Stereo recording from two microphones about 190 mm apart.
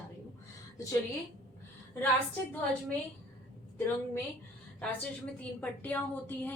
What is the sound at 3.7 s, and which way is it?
Speech, 10° left (ahead or behind).